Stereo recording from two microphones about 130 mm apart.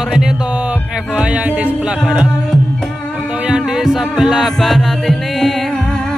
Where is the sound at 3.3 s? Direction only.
5° right (ahead or behind).